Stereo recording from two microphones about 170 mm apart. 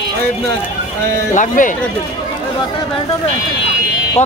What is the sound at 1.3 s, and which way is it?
Speech, 50° left (ahead or behind).